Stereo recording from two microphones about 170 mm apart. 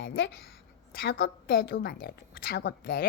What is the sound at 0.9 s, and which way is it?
A woman's voice, 65° left (ahead or behind).